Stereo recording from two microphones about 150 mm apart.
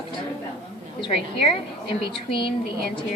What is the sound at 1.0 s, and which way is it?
Speech, 40° left (ahead or behind).